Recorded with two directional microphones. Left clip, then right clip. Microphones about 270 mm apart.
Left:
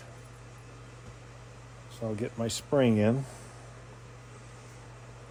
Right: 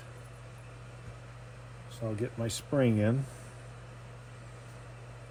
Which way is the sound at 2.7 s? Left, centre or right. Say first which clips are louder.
Left 4 dB; centre.